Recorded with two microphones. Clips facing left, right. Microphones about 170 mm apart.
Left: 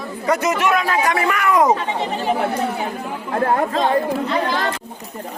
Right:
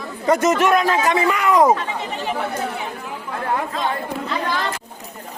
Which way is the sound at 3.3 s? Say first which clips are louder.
Left 5 dB; 50° left (ahead or behind).